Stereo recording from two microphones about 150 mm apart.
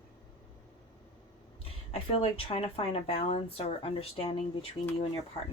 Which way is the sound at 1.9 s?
40° left (ahead or behind).